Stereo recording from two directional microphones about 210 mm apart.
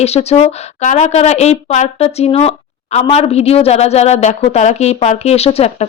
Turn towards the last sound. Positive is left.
turn(degrees=30)  # may be behind; listen again after turning